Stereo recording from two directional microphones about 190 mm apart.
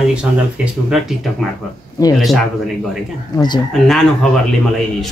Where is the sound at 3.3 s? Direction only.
20° left (ahead or behind).